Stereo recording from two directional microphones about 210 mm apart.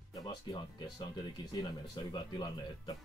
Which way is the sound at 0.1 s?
20° left (ahead or behind).